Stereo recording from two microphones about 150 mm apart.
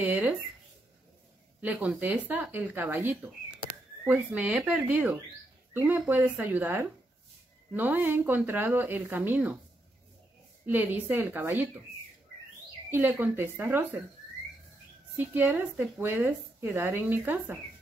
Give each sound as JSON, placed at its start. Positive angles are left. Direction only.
{"t": 0.0, "sound": "a sound", "side_deg": -15}
{"t": 1.6, "sound": "a woman's voice", "side_deg": -10}
{"t": 10.6, "sound": "a woman's voice", "side_deg": -10}
{"t": 12.9, "sound": "a woman's voice", "side_deg": -15}
{"t": 15.1, "sound": "a woman's voice", "side_deg": -10}